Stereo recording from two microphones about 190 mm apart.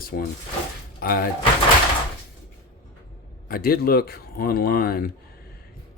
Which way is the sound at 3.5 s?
50° left (ahead or behind).